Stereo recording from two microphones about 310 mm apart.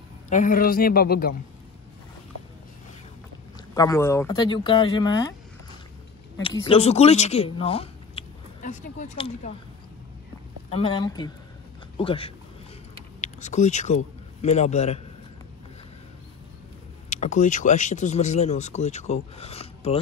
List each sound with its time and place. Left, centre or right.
0.3 s speech: left
3.5 s speech: centre
6.3 s speech: centre
10.7 s speech: centre
17.1 s speech: left